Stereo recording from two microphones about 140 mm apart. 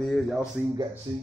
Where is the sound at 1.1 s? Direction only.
35° right (ahead or behind).